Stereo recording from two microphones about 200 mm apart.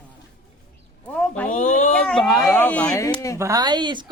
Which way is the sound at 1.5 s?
40° left (ahead or behind).